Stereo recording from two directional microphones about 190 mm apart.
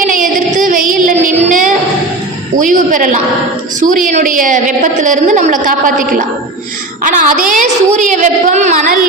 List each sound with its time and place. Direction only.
0.1 s child singing: 45° right (ahead or behind)
2.6 s a woman's voice: 45° right (ahead or behind)